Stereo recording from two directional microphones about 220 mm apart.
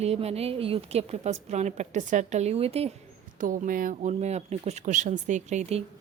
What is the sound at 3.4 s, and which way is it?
Speech, 40° right (ahead or behind).